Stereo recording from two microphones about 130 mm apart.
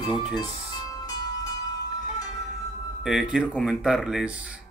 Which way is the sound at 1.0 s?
30° left (ahead or behind).